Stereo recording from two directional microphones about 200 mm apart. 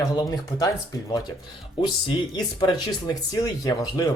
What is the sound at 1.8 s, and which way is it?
Speech, 20° left (ahead or behind).